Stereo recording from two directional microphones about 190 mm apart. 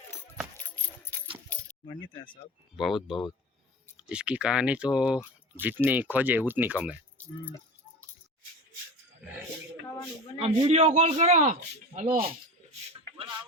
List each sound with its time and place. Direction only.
1.1 s clip-clop: 10° left (ahead or behind)
1.9 s speech: 25° left (ahead or behind)
2.7 s speech: centre (ahead or behind)
7.2 s speech: 10° left (ahead or behind)
10.3 s a man's voice: 35° right (ahead or behind)
12.7 s a sound: 35° right (ahead or behind)